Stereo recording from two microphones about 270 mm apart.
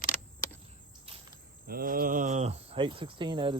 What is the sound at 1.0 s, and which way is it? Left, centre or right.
Cricket, right.